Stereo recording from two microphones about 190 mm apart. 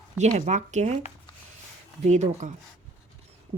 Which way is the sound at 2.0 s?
35° right (ahead or behind).